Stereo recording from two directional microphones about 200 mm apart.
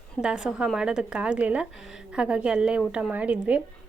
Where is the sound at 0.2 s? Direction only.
5° right (ahead or behind).